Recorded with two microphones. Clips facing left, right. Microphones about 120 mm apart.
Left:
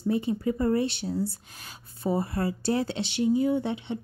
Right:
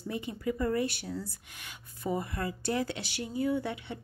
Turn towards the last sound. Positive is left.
turn(degrees=25)  # may be behind; listen again after turning